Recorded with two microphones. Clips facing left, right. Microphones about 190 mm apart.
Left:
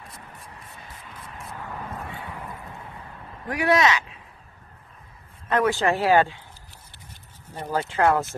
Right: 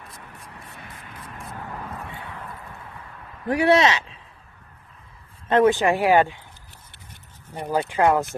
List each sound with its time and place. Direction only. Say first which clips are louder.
1.4 s vehicle: right 1 dB; centre (ahead or behind)
3.4 s speech: right 3 dB; 30° right (ahead or behind)
5.5 s speech: right 4 dB; 20° right (ahead or behind)
7.5 s speech: right 3 dB; 15° right (ahead or behind)